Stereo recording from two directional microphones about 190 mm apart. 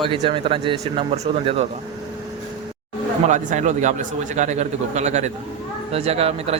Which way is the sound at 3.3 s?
40° right (ahead or behind).